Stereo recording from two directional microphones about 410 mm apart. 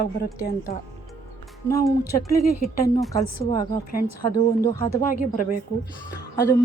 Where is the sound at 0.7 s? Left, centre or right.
Left.